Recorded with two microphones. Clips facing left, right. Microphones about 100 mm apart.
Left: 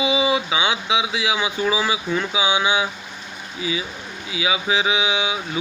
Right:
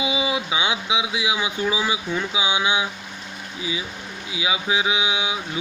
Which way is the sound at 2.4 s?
30° left (ahead or behind).